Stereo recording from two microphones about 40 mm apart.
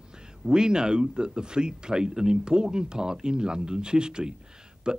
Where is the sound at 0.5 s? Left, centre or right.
Centre.